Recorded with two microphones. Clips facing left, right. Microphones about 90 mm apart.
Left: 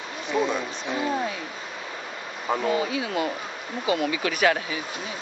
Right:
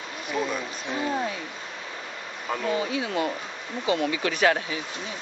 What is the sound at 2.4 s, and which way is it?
Speech, 20° left (ahead or behind).